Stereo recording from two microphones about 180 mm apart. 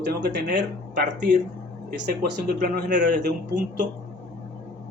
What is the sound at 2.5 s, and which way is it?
Speech, 50° right (ahead or behind).